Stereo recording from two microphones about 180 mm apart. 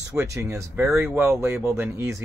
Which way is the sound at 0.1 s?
15° right (ahead or behind).